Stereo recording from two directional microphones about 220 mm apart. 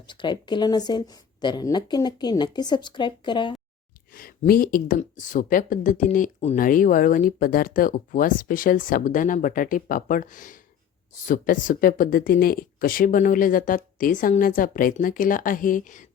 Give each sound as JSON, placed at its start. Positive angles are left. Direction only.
{"t": 0.0, "sound": "a woman's voice", "side_deg": 20}
{"t": 4.1, "sound": "a woman's voice", "side_deg": 40}